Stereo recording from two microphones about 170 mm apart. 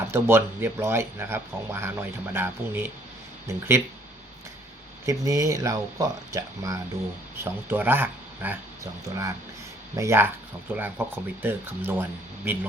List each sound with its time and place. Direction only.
0.1 s speech: 15° right (ahead or behind)
5.0 s speech: 20° right (ahead or behind)